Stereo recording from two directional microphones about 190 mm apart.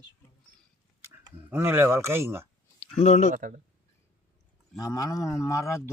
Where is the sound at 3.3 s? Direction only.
45° right (ahead or behind).